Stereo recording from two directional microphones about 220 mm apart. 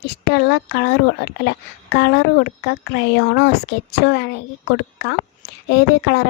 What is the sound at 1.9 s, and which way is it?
A woman's voice, 50° left (ahead or behind).